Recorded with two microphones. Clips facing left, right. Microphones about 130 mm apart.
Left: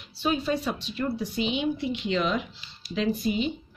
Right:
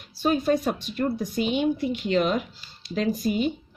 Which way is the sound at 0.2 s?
45° right (ahead or behind).